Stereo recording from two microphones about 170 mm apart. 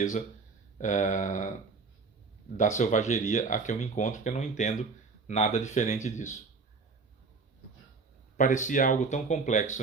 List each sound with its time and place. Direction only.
0.8 s speech: 45° left (ahead or behind)
2.6 s speech: 45° left (ahead or behind)
8.4 s speech: 50° left (ahead or behind)